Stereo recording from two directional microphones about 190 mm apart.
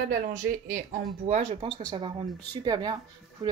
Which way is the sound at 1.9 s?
25° right (ahead or behind).